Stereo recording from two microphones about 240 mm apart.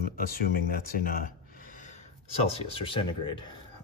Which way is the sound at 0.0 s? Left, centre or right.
Left.